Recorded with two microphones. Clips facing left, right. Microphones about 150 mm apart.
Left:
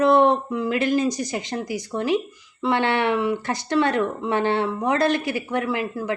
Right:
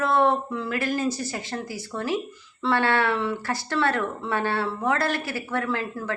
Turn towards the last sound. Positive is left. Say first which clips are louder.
# left 3 dB
turn(degrees=15)  # may be behind; listen again after turning